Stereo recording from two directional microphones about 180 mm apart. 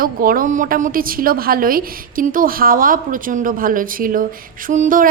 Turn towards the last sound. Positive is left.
turn(degrees=-45)  # may be behind; listen again after turning